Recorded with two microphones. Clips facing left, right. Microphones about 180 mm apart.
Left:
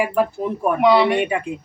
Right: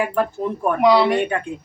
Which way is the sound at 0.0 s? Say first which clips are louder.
Left 1 dB; 10° left (ahead or behind).